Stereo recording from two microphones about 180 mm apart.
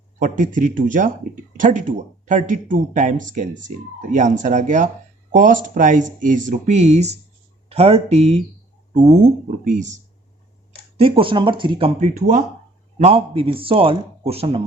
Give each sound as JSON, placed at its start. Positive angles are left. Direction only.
{"t": 0.2, "sound": "speech", "side_deg": -45}
{"t": 10.9, "sound": "speech", "side_deg": -30}
{"t": 13.0, "sound": "speech", "side_deg": -35}